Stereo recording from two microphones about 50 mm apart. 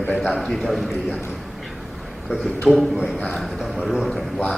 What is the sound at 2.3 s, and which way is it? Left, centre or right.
Speech, centre.